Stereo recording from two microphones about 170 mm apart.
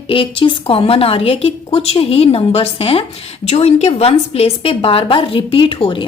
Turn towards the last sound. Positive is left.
turn(degrees=30)  # may be behind; listen again after turning